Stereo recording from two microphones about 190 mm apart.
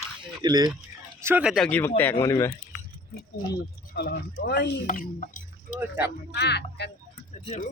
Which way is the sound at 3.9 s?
60° left (ahead or behind).